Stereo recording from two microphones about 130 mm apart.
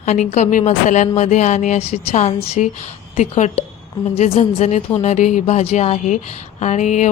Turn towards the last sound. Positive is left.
turn(degrees=70)  # may be behind; listen again after turning